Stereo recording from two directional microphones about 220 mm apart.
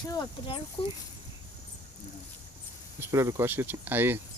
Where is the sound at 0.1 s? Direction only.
20° left (ahead or behind).